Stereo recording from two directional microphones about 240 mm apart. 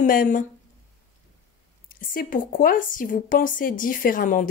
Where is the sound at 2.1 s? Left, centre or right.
Left.